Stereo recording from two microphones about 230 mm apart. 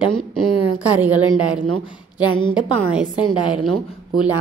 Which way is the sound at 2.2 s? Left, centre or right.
Left.